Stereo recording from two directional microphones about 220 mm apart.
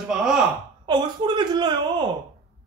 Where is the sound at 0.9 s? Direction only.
20° right (ahead or behind).